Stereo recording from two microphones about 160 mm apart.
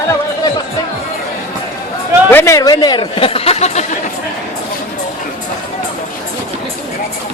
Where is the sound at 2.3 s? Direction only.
15° left (ahead or behind); by 3.8 s 40° left (ahead or behind).